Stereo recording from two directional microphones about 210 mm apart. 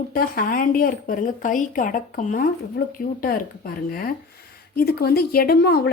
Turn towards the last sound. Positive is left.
turn(degrees=45)  # may be behind; listen again after turning